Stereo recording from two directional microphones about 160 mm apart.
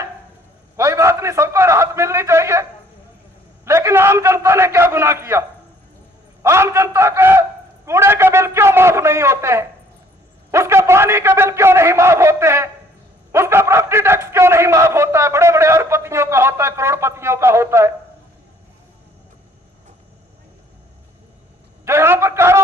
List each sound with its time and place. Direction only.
0.8 s a sound: 20° right (ahead or behind)
3.7 s a man's voice: 15° right (ahead or behind)
21.8 s a man's voice: 15° right (ahead or behind)